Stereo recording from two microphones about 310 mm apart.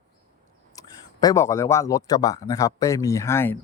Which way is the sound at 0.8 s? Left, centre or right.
Centre.